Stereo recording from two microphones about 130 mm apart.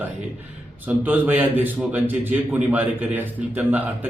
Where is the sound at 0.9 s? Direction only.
15° right (ahead or behind).